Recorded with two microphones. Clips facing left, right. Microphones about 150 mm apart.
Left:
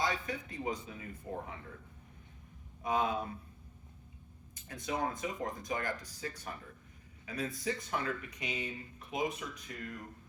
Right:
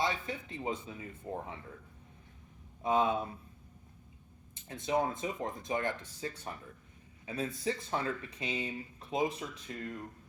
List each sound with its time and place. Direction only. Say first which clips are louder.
0.0 s a man's voice: right 1 dB; 25° right (ahead or behind)
2.8 s speech: right 3 dB; 25° right (ahead or behind)
4.7 s speech: right 4 dB; 25° right (ahead or behind)